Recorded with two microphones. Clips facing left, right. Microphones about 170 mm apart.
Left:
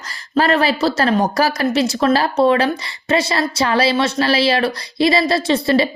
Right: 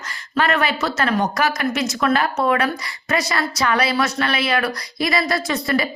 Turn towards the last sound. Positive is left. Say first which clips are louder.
# left 6 dB
turn(degrees=30)  # may be behind; listen again after turning